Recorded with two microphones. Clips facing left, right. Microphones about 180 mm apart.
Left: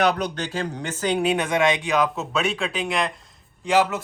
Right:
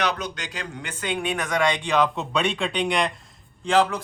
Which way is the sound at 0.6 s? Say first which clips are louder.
Left 5 dB; 35° left (ahead or behind).